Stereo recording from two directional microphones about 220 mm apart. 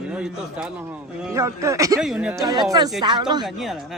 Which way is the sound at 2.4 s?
15° right (ahead or behind).